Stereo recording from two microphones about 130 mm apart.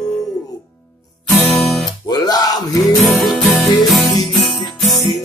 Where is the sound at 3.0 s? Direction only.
Centre (ahead or behind).